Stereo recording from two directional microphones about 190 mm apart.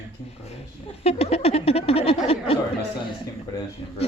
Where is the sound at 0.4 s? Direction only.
30° left (ahead or behind).